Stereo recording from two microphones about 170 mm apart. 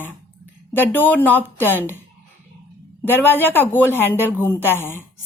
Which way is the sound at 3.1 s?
10° left (ahead or behind).